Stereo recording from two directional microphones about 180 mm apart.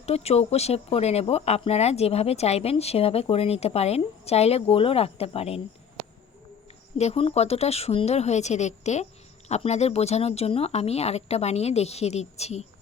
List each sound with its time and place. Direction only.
0.0 s speech: 35° left (ahead or behind)
7.0 s speech: 35° left (ahead or behind)